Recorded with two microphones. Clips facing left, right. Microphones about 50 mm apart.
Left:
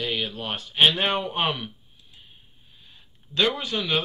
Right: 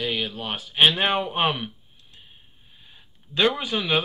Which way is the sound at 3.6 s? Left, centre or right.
Centre.